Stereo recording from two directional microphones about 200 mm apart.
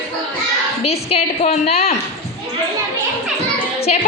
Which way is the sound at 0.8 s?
30° left (ahead or behind).